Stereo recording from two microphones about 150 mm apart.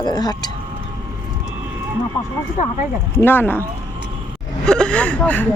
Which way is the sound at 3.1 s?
15° left (ahead or behind).